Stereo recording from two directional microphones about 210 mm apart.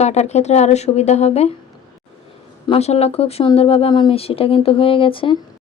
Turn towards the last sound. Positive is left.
turn(degrees=25)  # may be behind; listen again after turning